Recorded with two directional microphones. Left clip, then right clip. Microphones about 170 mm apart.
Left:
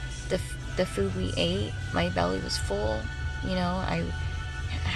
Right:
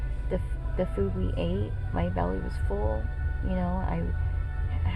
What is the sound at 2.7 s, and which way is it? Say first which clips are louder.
Speech: left 1 dB; 45° left (ahead or behind).